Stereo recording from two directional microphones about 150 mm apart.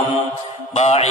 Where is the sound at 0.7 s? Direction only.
45° left (ahead or behind).